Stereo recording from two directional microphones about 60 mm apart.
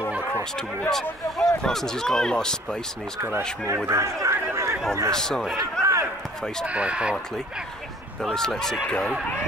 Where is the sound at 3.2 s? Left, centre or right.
Right.